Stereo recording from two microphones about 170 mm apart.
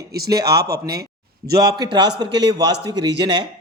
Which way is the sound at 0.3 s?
20° right (ahead or behind).